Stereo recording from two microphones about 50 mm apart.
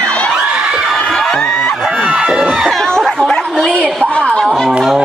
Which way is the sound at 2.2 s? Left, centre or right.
Centre.